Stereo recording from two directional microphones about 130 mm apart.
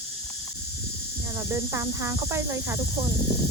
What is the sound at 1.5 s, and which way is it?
Speech, 20° right (ahead or behind).